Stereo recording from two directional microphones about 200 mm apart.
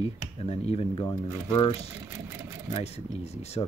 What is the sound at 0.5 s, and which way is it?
Speech, 30° left (ahead or behind).